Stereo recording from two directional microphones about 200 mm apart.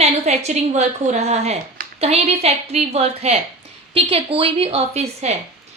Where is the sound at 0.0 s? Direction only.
35° right (ahead or behind).